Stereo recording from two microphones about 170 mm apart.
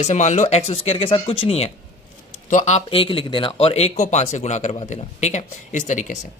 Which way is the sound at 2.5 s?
45° left (ahead or behind).